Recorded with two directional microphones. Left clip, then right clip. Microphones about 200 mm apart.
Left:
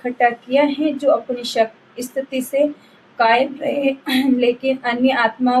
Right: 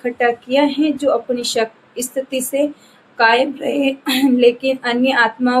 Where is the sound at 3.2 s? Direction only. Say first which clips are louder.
Right 2 dB; 50° right (ahead or behind).